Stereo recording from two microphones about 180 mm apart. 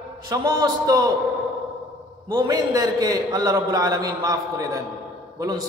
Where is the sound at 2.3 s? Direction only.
20° right (ahead or behind).